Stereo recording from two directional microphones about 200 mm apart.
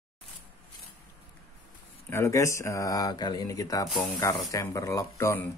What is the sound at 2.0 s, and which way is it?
Speech, 15° left (ahead or behind).